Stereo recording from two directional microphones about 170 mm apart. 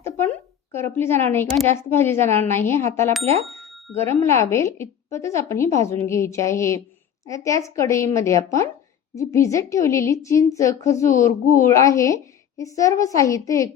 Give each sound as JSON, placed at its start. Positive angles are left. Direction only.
{"t": 0.7, "sound": "a woman's voice", "side_deg": 15}